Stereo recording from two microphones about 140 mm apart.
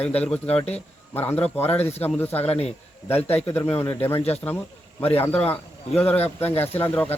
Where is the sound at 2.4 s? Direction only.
50° left (ahead or behind).